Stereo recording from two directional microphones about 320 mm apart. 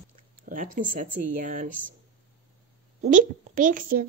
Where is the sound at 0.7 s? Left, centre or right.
Right.